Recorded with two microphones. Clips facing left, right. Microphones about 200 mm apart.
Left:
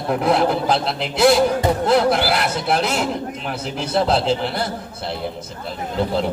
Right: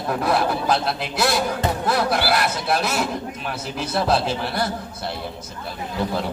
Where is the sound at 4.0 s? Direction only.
25° left (ahead or behind).